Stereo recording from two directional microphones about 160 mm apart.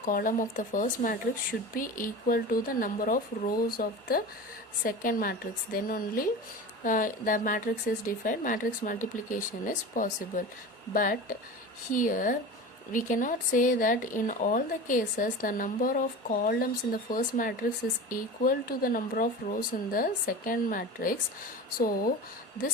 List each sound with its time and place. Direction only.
0.0 s speech: 55° left (ahead or behind)